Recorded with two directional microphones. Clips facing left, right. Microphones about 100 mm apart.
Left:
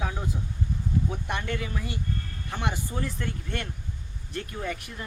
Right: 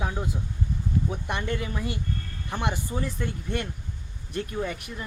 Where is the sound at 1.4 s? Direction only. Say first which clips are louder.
Right 2 dB; 15° right (ahead or behind).